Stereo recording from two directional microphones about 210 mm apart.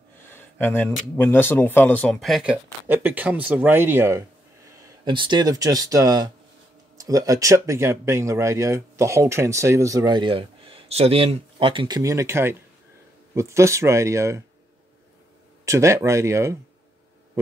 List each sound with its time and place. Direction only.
0.3 s speech: 10° left (ahead or behind); by 14.4 s 15° right (ahead or behind)
15.6 s speech: 15° right (ahead or behind)